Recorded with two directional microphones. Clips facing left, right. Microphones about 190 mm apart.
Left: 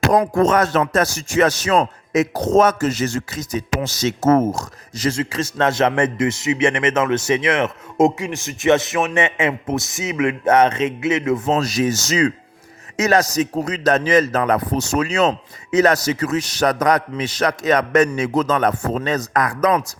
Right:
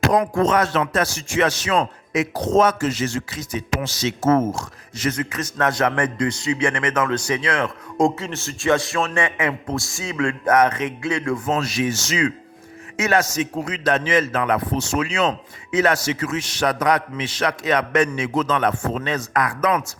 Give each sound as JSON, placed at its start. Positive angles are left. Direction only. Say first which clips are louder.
{"t": 0.2, "sound": "a man's voice", "louder": "left 3 dB", "side_deg": 45}
{"t": 11.6, "sound": "a man's voice", "louder": "left 3 dB", "side_deg": 40}